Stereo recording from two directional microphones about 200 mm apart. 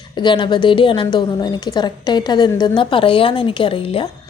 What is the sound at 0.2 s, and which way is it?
A woman's voice, 20° left (ahead or behind).